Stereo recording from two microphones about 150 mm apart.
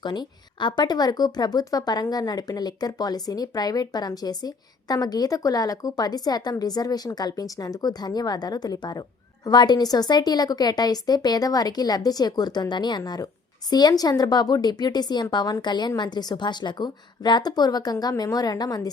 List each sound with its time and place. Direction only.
0.0 s speech: 30° left (ahead or behind)